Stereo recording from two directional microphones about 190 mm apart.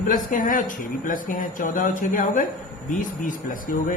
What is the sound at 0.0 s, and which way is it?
Speech, 45° left (ahead or behind).